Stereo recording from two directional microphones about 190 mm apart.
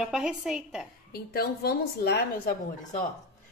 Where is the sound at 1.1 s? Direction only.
55° left (ahead or behind).